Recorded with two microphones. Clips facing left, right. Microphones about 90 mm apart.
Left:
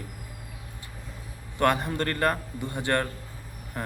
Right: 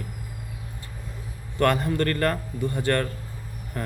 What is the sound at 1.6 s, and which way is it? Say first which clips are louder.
Speech: right 2 dB; 20° left (ahead or behind).